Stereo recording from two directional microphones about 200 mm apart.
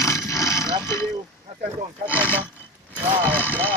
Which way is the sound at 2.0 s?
10° left (ahead or behind).